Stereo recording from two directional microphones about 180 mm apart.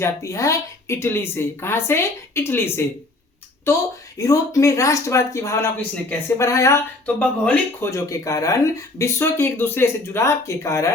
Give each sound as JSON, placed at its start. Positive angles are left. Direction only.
{"t": 0.0, "sound": "speech", "side_deg": 15}
{"t": 4.2, "sound": "speech", "side_deg": 15}